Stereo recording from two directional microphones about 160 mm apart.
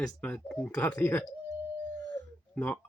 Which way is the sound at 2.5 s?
10° left (ahead or behind).